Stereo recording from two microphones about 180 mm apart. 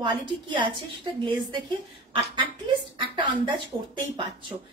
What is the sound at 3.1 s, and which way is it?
A woman's voice, 25° right (ahead or behind).